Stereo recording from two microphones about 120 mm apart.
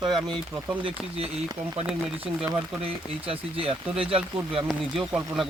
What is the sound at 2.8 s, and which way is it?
Speech, 50° right (ahead or behind).